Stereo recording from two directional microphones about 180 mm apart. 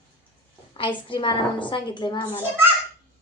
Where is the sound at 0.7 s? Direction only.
30° left (ahead or behind).